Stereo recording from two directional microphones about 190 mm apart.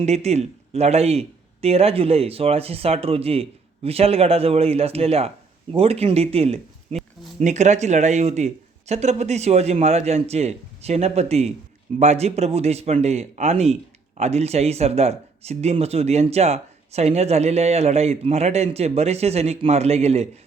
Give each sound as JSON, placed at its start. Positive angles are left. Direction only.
{"t": 0.0, "sound": "speech", "side_deg": -35}
{"t": 6.9, "sound": "a sound", "side_deg": -35}
{"t": 7.3, "sound": "speech", "side_deg": -40}